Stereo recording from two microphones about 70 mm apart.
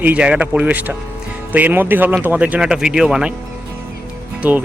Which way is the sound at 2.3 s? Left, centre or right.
Centre.